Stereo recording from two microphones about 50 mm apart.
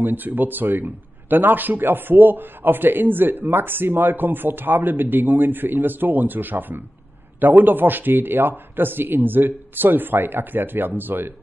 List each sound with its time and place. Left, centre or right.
0.0 s speech: right